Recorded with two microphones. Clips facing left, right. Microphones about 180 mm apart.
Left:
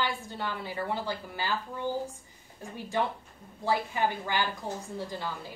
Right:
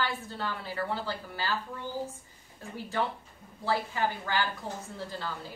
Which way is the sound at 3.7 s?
15° left (ahead or behind).